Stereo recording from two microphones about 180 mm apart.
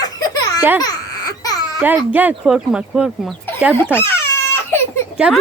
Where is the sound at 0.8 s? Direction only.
20° left (ahead or behind).